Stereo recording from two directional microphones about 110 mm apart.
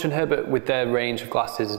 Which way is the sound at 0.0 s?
20° right (ahead or behind).